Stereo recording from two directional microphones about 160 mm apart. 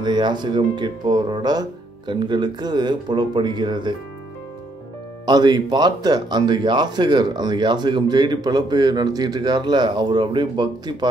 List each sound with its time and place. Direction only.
0.0 s speech: 30° right (ahead or behind)
5.2 s speech: 25° right (ahead or behind)